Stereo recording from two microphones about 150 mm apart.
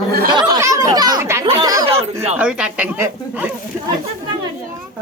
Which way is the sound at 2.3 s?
5° right (ahead or behind).